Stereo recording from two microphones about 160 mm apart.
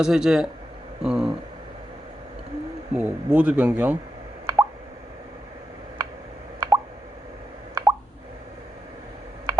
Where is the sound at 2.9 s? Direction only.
10° right (ahead or behind).